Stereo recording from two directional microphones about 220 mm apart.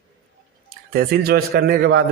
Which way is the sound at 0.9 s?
45° right (ahead or behind).